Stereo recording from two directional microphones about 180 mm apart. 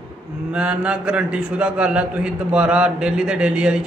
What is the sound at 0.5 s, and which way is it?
A man's voice, 5° right (ahead or behind).